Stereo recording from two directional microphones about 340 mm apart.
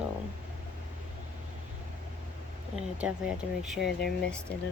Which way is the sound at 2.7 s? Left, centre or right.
Centre.